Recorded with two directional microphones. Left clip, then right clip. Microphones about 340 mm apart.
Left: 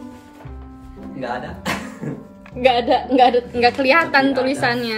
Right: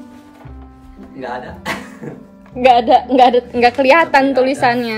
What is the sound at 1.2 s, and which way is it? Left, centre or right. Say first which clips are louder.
Speech: right 1 dB; centre.